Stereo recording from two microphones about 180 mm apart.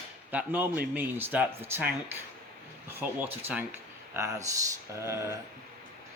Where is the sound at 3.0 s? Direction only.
10° right (ahead or behind).